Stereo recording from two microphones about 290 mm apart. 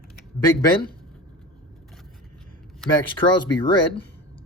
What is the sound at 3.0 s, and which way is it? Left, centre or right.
Speech, centre.